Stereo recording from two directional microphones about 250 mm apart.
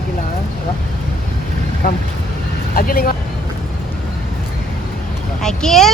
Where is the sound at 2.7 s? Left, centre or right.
Left.